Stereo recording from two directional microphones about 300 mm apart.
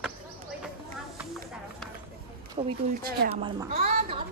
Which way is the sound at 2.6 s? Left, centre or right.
Right.